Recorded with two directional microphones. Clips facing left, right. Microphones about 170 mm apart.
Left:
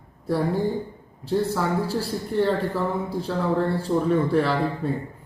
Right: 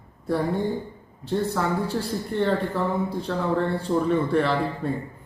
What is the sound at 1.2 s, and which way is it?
Speech, 5° left (ahead or behind).